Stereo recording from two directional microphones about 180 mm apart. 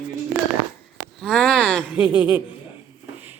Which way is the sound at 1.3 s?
5° left (ahead or behind).